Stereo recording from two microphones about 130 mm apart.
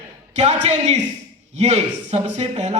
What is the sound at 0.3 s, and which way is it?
Speech, 60° right (ahead or behind).